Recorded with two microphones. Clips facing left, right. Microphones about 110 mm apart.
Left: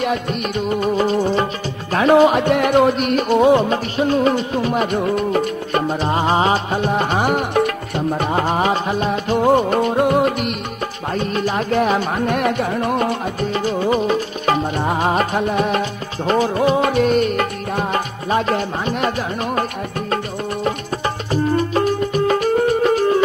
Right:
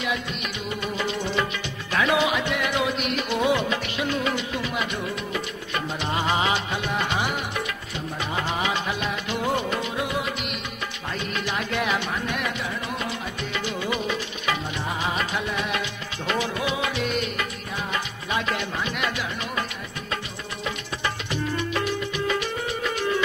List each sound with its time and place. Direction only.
0.0 s music of bollywood: 45° left (ahead or behind)
11.1 s music: 40° left (ahead or behind)
20.6 s music: 40° left (ahead or behind)